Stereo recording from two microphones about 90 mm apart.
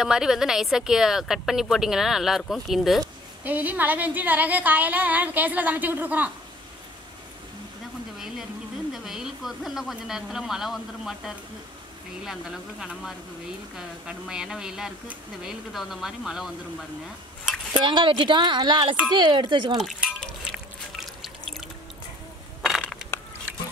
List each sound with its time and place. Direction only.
0.0 s speech: 5° right (ahead or behind)
3.4 s a woman's voice: 20° right (ahead or behind)
8.9 s speech: 5° right (ahead or behind)
17.8 s speech: 60° right (ahead or behind)
19.8 s a sound: centre (ahead or behind)
21.2 s drip: centre (ahead or behind)